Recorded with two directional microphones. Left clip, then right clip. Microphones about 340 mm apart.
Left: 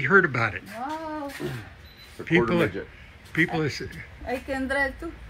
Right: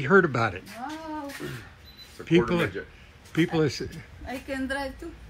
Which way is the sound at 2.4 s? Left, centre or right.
Centre.